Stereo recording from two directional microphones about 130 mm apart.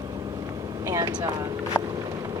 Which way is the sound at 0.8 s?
25° right (ahead or behind).